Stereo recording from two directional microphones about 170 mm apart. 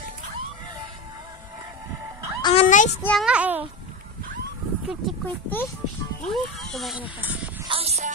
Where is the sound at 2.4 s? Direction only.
35° left (ahead or behind).